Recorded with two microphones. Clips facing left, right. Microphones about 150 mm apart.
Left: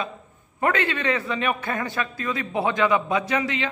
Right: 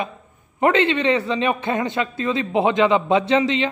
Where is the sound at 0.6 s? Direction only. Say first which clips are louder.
Right 6 dB; 25° right (ahead or behind).